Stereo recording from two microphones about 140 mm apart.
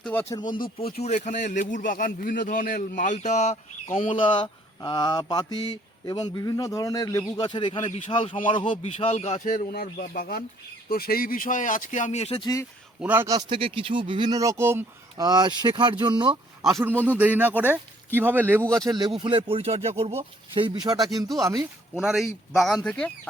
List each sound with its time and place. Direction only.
0.1 s speech: 15° left (ahead or behind)
0.3 s speech: 30° left (ahead or behind)
0.8 s a man's voice: 45° left (ahead or behind)
7.8 s a man's voice: 50° left (ahead or behind)
12.4 s speech: 25° left (ahead or behind)
13.0 s speech: 10° right (ahead or behind)
13.5 s speech: 40° right (ahead or behind); by 14.8 s 20° right (ahead or behind)
15.2 s speech: 30° right (ahead or behind)
17.0 s speech: 15° right (ahead or behind)
18.6 s speech: 5° left (ahead or behind)
18.9 s speech: 30° right (ahead or behind)
21.6 s speech: 5° right (ahead or behind)